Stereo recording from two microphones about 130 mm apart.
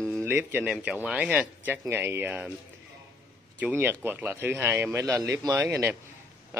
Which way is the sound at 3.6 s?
15° right (ahead or behind).